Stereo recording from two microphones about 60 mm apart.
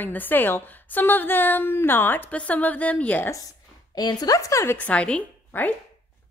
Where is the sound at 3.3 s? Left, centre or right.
Left.